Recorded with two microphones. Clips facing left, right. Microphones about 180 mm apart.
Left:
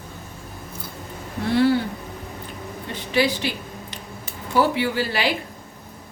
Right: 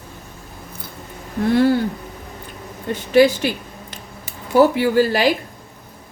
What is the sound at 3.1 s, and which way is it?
Speech, 45° right (ahead or behind).